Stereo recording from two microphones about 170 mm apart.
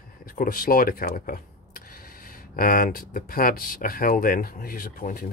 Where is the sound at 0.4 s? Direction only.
55° left (ahead or behind).